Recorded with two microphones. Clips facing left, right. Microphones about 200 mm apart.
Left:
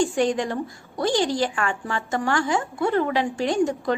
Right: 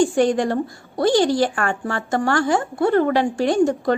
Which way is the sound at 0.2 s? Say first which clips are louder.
Right 5 dB; 55° right (ahead or behind).